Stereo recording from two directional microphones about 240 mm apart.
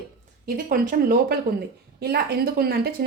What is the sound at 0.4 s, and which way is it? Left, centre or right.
A woman's voice, right.